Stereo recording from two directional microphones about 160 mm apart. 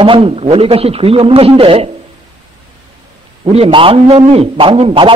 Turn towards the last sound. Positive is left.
turn(degrees=-35)  # may be behind; listen again after turning